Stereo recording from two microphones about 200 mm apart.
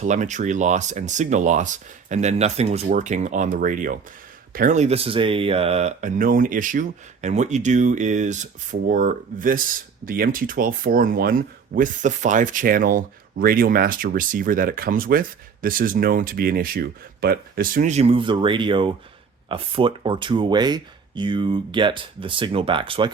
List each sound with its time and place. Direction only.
0.0 s speech: 35° right (ahead or behind)